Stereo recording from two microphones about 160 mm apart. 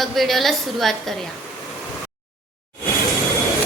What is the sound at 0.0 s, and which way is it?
Speech, centre (ahead or behind).